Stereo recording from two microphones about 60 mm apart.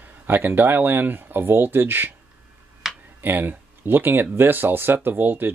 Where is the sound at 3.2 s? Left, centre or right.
Right.